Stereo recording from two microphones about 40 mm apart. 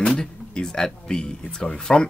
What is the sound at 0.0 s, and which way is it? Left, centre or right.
Speech, centre.